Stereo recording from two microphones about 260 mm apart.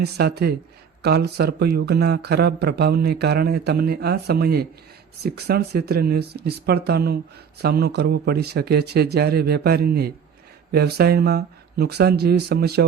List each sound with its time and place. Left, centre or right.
0.0 s speech: right